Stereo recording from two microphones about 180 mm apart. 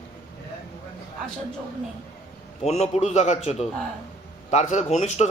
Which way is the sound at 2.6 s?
35° left (ahead or behind).